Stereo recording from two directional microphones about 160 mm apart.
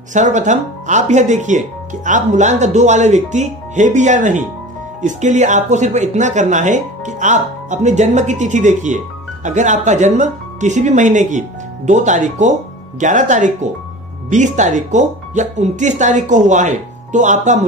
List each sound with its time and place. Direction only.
0.1 s speech: 50° right (ahead or behind)